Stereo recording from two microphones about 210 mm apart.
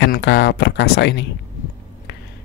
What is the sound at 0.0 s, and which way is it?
Speech, 55° left (ahead or behind).